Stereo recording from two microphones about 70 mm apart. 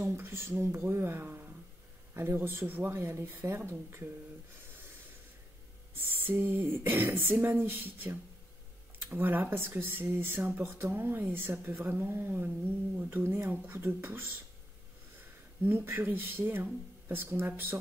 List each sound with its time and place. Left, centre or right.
0.0 s speech: right
5.9 s speech: right
15.6 s speech: right